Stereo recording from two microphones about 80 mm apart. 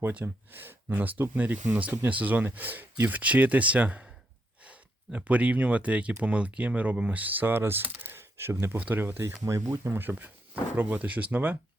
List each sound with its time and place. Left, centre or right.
0.0 s speech: right
9.4 s speech: right